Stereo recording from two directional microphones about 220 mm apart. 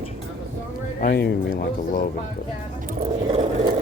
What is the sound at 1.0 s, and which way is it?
Speech, 45° left (ahead or behind).